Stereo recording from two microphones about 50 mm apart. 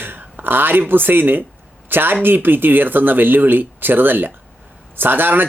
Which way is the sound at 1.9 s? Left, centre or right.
Right.